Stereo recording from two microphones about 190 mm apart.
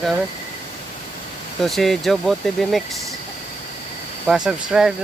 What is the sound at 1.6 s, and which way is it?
Speech, centre (ahead or behind).